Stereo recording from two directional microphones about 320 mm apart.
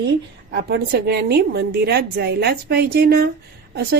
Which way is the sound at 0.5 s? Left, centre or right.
Right.